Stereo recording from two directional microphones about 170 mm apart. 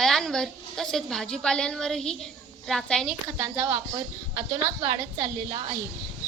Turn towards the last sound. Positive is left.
turn(degrees=-30)  # may be behind; listen again after turning